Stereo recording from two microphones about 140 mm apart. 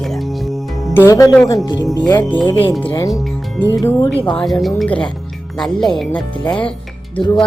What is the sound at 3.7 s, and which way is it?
Speech, 20° left (ahead or behind).